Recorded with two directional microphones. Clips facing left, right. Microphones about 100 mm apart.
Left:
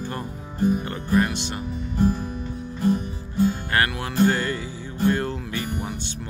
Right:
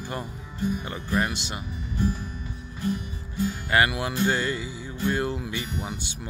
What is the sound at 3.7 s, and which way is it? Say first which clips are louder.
Speech: right 4 dB; 10° right (ahead or behind).